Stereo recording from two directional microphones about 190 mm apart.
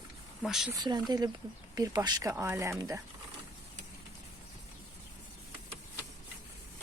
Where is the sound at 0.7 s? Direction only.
20° right (ahead or behind).